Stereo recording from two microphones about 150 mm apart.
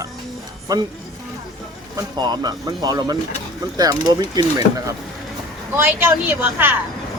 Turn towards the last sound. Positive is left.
turn(degrees=-15)  # may be behind; listen again after turning